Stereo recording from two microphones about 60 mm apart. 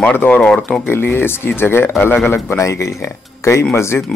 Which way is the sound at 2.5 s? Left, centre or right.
Left.